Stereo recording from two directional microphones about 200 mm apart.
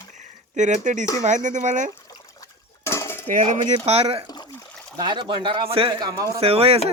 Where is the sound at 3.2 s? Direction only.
40° right (ahead or behind); by 6.4 s 20° right (ahead or behind).